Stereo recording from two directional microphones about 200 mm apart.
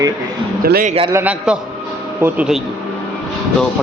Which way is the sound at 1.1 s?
10° right (ahead or behind).